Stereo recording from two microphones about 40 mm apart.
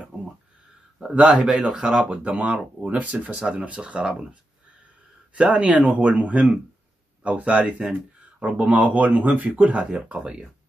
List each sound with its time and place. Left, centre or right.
1.2 s speech: centre
2.0 s speech: right
5.3 s speech: right
7.8 s speech: right
8.6 s speech: right
9.8 s speech: right